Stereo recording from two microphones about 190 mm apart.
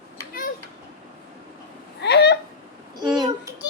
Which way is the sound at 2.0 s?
60° left (ahead or behind).